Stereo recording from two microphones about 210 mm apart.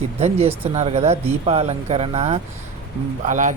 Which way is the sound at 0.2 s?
30° right (ahead or behind).